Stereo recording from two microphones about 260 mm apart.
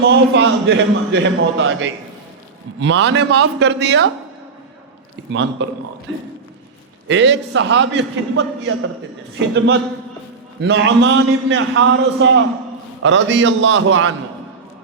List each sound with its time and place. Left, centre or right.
0.0 s a man's voice: right
5.3 s a man's voice: right
7.1 s a man's voice: right
10.6 s a man's voice: right